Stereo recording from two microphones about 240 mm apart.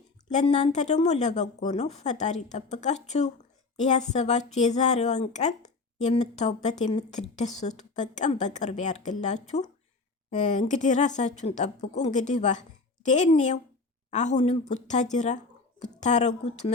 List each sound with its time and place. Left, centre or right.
0.3 s a woman's voice: left